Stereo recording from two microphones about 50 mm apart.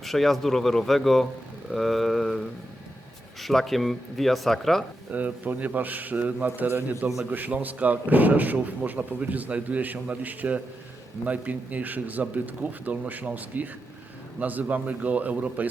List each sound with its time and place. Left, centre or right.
0.0 s speech: centre
5.1 s speech: right